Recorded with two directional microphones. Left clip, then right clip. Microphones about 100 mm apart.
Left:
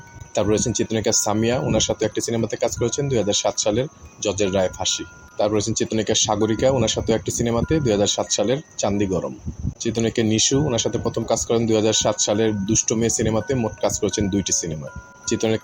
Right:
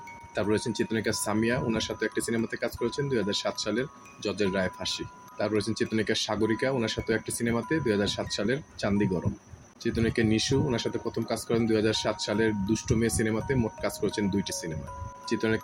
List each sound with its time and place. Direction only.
0.3 s speech: 65° left (ahead or behind)